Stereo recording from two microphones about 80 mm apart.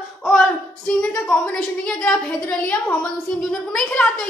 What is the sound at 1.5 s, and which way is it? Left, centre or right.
Speech, centre.